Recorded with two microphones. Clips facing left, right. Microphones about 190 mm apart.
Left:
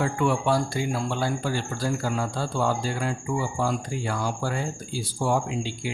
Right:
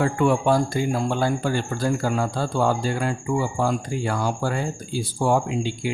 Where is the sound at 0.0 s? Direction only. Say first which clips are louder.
Right 4 dB; 50° right (ahead or behind).